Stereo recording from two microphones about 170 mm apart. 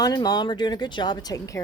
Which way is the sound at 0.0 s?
20° left (ahead or behind).